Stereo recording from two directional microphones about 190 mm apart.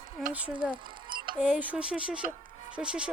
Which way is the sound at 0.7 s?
25° right (ahead or behind).